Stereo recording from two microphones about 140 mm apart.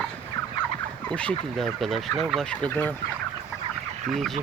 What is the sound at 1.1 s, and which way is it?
Speech, 10° left (ahead or behind).